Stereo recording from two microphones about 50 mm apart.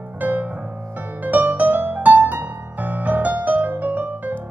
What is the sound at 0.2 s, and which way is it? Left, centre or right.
Piano, right.